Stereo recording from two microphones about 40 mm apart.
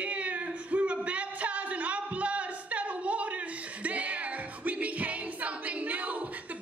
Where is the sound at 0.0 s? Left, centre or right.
Right.